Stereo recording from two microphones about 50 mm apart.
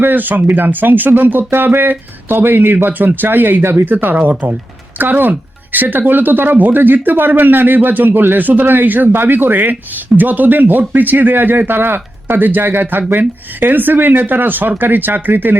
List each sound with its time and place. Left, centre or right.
0.0 s speech: right